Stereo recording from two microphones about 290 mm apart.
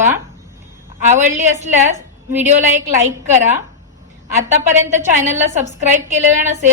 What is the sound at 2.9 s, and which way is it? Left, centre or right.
Speech, right.